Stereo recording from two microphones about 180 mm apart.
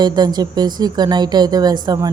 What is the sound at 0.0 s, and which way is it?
A woman's voice, 20° right (ahead or behind).